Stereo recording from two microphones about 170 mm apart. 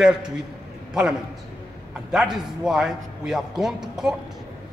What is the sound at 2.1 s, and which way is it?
A man's voice, centre (ahead or behind).